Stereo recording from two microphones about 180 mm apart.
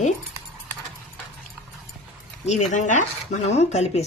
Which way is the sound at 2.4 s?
40° left (ahead or behind).